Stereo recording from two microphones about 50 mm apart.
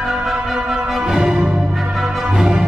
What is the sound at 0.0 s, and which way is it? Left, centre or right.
Music, centre.